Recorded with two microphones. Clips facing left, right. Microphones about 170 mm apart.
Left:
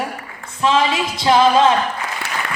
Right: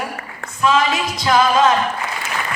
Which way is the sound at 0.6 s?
25° left (ahead or behind).